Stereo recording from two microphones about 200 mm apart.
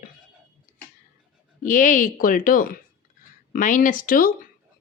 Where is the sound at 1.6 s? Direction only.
40° left (ahead or behind).